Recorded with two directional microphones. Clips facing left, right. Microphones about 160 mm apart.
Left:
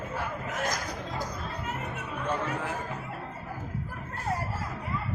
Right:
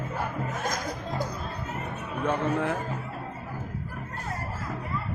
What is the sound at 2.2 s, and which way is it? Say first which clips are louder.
Speech: right 6 dB; 60° right (ahead or behind).